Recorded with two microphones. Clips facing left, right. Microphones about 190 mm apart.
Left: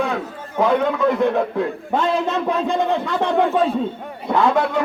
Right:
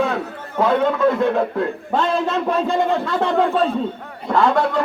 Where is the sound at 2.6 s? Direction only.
15° left (ahead or behind).